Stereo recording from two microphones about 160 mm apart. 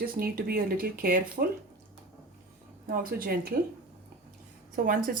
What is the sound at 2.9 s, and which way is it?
Speech, 65° right (ahead or behind).